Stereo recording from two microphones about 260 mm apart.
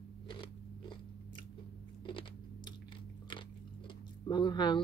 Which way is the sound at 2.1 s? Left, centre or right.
Centre.